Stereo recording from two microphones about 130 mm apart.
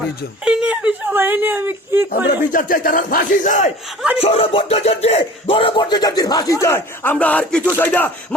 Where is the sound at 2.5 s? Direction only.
90° left.